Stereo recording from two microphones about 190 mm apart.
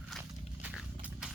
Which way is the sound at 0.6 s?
5° right (ahead or behind).